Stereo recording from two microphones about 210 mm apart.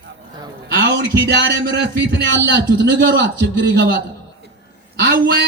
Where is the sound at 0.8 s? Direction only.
55° right (ahead or behind).